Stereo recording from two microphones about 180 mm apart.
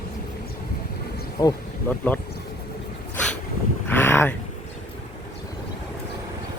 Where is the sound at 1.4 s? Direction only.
25° left (ahead or behind).